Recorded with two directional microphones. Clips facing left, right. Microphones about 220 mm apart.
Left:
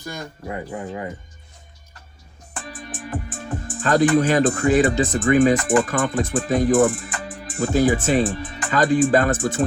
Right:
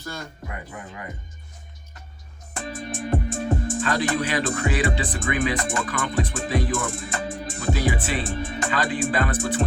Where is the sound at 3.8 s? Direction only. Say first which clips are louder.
Left 11 dB; 45° left (ahead or behind).